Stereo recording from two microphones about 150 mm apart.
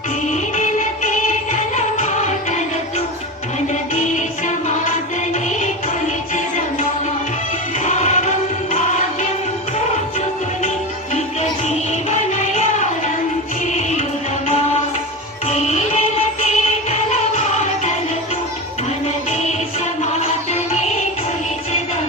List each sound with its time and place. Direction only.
0.5 s music: 55° left (ahead or behind)
3.7 s music: 55° left (ahead or behind)
7.9 s music: 50° left (ahead or behind)
11.1 s music: 50° left (ahead or behind)
15.4 s music: 50° left (ahead or behind)
19.0 s music: 50° left (ahead or behind)